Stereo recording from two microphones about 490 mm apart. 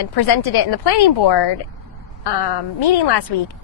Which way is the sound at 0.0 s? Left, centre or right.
Left.